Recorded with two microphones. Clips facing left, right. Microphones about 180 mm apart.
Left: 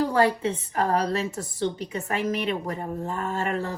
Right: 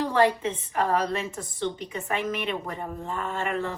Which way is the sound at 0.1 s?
35° left (ahead or behind).